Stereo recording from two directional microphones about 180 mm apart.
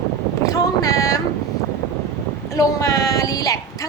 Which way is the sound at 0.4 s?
20° left (ahead or behind).